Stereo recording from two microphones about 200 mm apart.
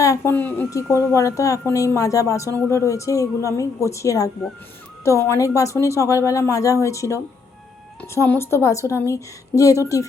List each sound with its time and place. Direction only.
0.0 s a woman's voice: 15° left (ahead or behind)